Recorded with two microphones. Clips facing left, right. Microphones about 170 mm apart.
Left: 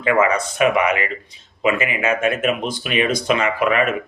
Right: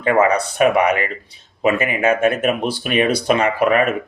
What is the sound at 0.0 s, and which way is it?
Speech, 40° right (ahead or behind).